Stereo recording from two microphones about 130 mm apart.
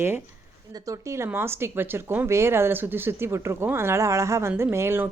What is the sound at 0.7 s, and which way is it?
Speech, 25° right (ahead or behind).